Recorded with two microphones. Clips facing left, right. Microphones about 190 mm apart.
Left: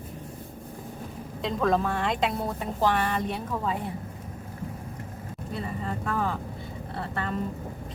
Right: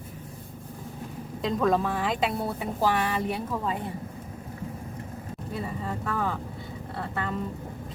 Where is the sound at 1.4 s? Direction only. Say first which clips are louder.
Right 1 dB; centre (ahead or behind).